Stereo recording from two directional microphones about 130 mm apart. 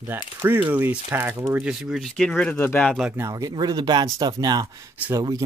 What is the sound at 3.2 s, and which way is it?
Speech, 25° right (ahead or behind).